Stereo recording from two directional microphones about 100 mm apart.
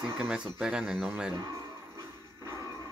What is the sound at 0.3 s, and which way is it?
Speech, 5° right (ahead or behind).